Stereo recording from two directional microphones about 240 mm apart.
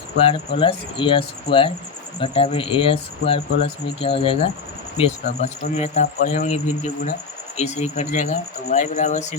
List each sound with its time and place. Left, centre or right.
0.3 s speech: left